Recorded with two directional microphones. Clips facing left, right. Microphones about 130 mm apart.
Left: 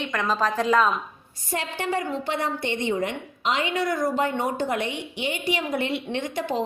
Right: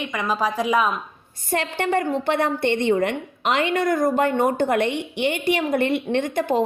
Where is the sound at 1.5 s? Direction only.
60° right (ahead or behind).